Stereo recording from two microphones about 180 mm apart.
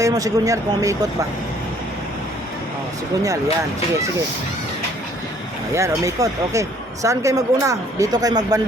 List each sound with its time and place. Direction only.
0.0 s speech: 20° right (ahead or behind)
5.7 s speech: 15° right (ahead or behind)